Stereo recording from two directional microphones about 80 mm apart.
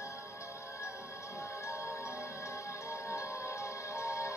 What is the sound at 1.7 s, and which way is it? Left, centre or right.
Music, left.